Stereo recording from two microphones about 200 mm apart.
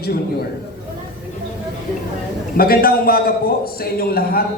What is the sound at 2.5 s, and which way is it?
A man's voice, 50° left (ahead or behind).